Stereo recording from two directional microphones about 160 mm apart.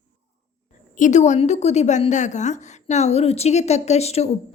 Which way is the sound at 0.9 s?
50° left (ahead or behind).